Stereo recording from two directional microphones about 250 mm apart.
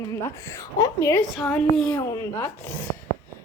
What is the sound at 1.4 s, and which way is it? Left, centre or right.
A woman's voice, centre.